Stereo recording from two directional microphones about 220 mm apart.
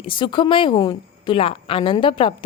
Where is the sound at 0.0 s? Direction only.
20° left (ahead or behind).